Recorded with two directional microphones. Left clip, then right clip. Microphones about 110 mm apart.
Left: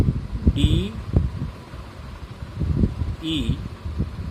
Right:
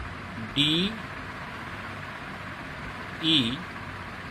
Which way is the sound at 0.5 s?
25° left (ahead or behind).